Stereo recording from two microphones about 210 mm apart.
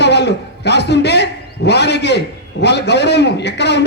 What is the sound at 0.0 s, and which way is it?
A man's voice, 55° left (ahead or behind).